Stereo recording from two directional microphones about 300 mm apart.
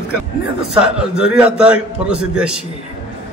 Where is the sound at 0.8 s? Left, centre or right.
Centre.